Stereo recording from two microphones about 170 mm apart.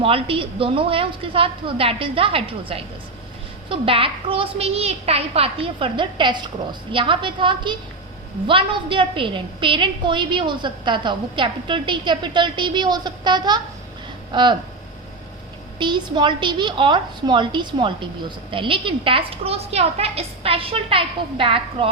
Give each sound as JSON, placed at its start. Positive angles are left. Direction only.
{"t": 0.0, "sound": "a woman's voice", "side_deg": -30}
{"t": 15.8, "sound": "a woman's voice", "side_deg": -30}